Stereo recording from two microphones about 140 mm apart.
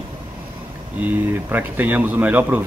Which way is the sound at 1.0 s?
15° right (ahead or behind).